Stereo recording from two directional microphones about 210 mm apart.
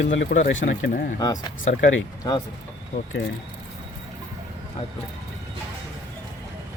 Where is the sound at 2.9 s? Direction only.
40° left (ahead or behind).